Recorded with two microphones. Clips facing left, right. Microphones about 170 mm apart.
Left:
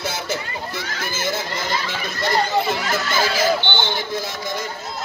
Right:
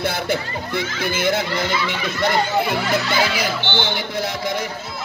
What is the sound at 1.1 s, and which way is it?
Speech, 60° right (ahead or behind).